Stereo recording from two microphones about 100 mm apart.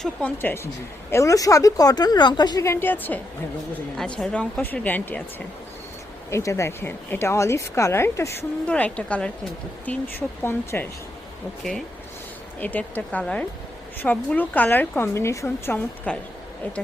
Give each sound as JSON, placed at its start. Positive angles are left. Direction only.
{"t": 0.0, "sound": "speech", "side_deg": 15}
{"t": 1.1, "sound": "speech", "side_deg": 35}
{"t": 2.6, "sound": "a woman's voice", "side_deg": 20}
{"t": 3.9, "sound": "speech", "side_deg": 10}
{"t": 6.3, "sound": "a woman's voice", "side_deg": 30}
{"t": 8.6, "sound": "a woman's voice", "side_deg": 15}
{"t": 12.5, "sound": "a woman's voice", "side_deg": 15}